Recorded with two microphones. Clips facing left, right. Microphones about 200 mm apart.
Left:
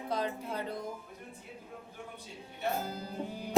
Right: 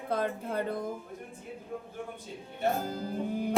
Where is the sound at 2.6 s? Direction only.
45° right (ahead or behind).